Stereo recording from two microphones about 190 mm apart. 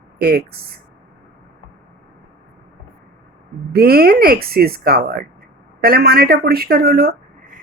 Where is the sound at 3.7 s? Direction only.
50° right (ahead or behind).